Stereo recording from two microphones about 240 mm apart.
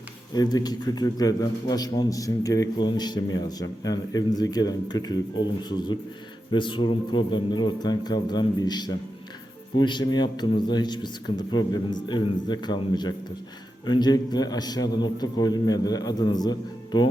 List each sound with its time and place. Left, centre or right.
0.3 s a man's voice: centre